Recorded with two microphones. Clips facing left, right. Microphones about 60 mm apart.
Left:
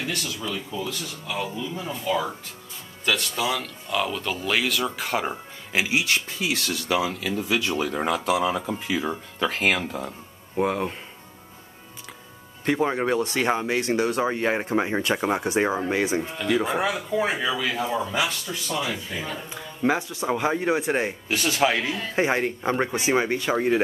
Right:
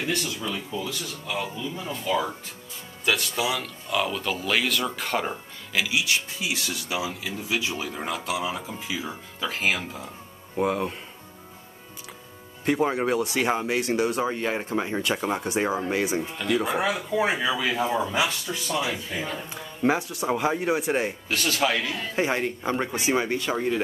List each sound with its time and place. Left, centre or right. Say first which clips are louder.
0.1 s speech: right 2 dB; right
0.4 s speech: even; centre
5.7 s speech: left 2 dB; left
12.6 s speech: even; centre
14.3 s speech: left 3 dB; centre
21.3 s speech: left 3 dB; centre
21.9 s speech: left 2 dB; centre